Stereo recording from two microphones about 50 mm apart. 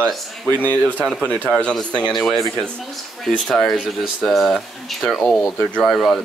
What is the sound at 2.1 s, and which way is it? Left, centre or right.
Speech, centre.